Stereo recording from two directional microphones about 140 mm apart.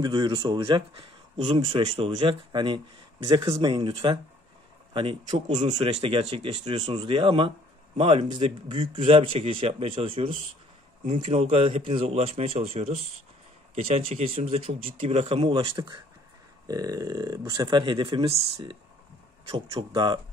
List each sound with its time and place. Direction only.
0.0 s speech: 30° right (ahead or behind)
5.8 s speech: 45° right (ahead or behind)